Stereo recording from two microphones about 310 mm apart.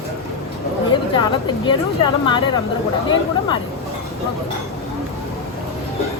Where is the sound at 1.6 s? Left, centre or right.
Centre.